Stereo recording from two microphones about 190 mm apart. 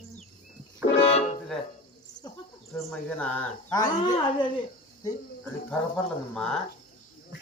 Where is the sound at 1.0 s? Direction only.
35° left (ahead or behind).